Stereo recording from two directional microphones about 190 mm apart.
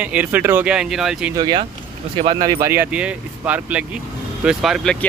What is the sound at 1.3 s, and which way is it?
Speech, 25° right (ahead or behind).